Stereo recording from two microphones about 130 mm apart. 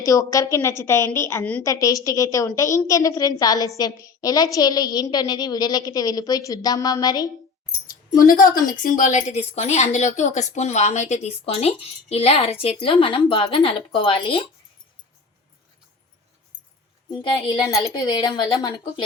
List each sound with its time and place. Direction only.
0.0 s a woman's voice: 25° left (ahead or behind)
7.9 s a woman's voice: 90° left; by 14.4 s 40° left (ahead or behind)
17.1 s a woman's voice: 35° left (ahead or behind)